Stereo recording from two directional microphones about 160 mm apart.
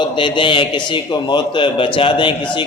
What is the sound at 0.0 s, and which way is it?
A man's voice, 30° left (ahead or behind).